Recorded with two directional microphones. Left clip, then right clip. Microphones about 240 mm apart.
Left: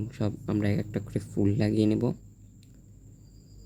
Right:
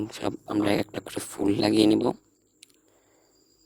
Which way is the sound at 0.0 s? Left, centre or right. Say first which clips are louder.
Right 3 dB; right.